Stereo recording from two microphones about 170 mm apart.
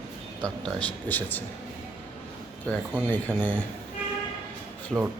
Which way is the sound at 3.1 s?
10° left (ahead or behind).